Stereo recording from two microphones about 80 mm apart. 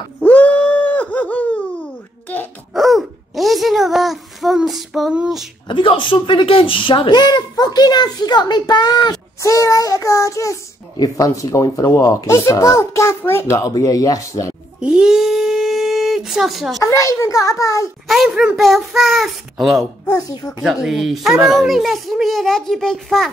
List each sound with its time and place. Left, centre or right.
0.2 s wail: centre
2.7 s a sound: centre
5.7 s speech: left
9.4 s child singing: left
11.0 s speech: left
13.7 s child singing: left
14.8 s a sound: centre
16.8 s child singing: left
18.0 s speech: centre
20.1 s child singing: left
20.6 s speech: centre